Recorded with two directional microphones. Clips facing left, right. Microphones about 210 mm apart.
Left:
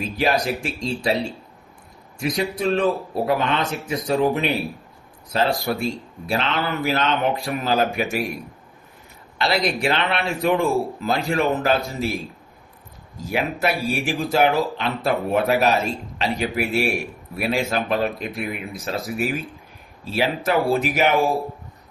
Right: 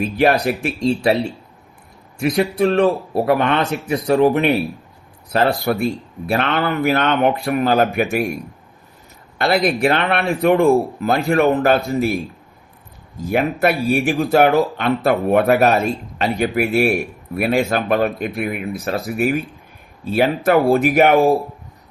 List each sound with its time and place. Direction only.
0.2 s speech: 60° right (ahead or behind)
2.1 s speech: 60° right (ahead or behind)
9.4 s speech: 55° right (ahead or behind)
13.2 s speech: 55° right (ahead or behind)